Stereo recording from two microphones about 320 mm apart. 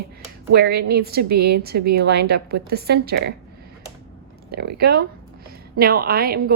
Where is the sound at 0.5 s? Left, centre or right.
Right.